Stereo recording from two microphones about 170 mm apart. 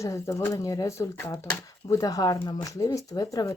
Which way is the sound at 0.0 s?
20° left (ahead or behind).